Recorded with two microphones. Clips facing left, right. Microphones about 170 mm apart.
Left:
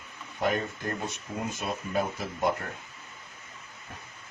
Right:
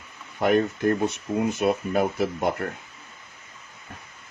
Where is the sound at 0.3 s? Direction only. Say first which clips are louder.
Right 8 dB; 65° right (ahead or behind).